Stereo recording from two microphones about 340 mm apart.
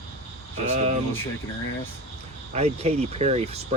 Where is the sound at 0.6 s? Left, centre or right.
Centre.